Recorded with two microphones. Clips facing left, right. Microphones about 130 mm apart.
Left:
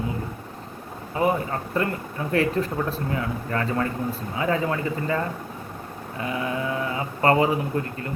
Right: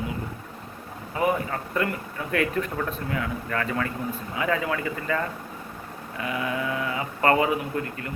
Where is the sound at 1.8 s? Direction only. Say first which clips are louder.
Left 1 dB; 30° left (ahead or behind).